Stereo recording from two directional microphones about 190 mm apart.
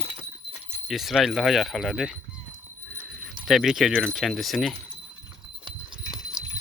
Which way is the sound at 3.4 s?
Centre (ahead or behind).